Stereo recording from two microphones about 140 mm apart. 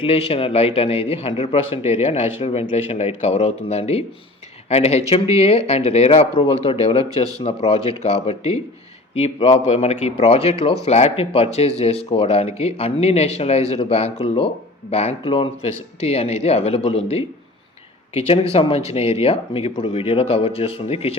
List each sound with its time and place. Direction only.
0.0 s speech: 45° left (ahead or behind)